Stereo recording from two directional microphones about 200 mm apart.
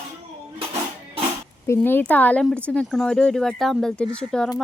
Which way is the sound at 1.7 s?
10° left (ahead or behind).